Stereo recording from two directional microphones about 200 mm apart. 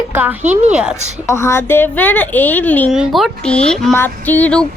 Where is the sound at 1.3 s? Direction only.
15° left (ahead or behind).